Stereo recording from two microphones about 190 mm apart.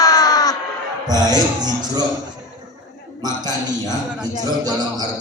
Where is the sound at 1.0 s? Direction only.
20° right (ahead or behind).